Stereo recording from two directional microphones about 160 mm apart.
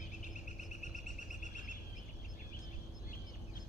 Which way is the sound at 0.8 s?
50° left (ahead or behind).